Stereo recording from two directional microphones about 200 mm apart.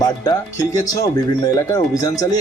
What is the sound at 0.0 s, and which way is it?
Speech, 20° left (ahead or behind).